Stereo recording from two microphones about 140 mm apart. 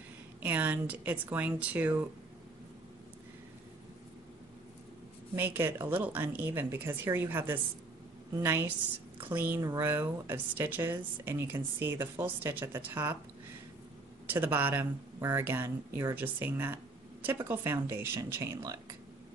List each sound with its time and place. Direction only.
0.4 s speech: 10° right (ahead or behind)
5.3 s speech: 15° right (ahead or behind)
14.3 s speech: 15° right (ahead or behind)